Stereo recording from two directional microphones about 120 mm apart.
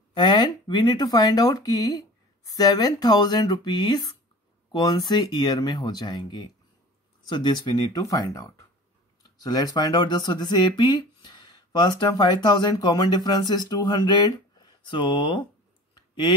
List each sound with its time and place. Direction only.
0.1 s speech: 35° left (ahead or behind)